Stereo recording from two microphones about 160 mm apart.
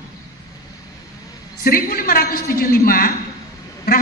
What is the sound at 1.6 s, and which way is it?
A woman's voice, 65° left (ahead or behind).